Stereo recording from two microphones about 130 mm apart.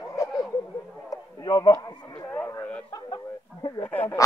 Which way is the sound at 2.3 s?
15° left (ahead or behind).